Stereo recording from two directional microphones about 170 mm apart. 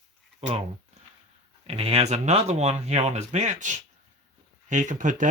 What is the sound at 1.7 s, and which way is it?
Speech, 35° right (ahead or behind).